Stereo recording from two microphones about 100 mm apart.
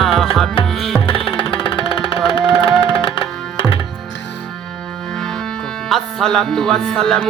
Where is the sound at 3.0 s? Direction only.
60° left (ahead or behind).